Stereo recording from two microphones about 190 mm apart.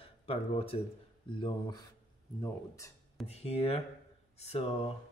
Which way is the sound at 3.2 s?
35° left (ahead or behind).